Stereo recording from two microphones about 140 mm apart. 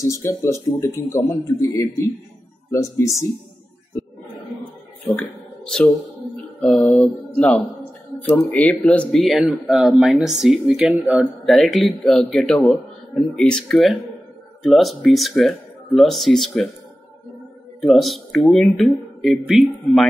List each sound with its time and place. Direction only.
0.0 s speech: 25° left (ahead or behind)
5.1 s mantra: 5° left (ahead or behind)
6.6 s mantra: 10° left (ahead or behind)
8.5 s speech: 10° left (ahead or behind)
17.7 s speech: centre (ahead or behind)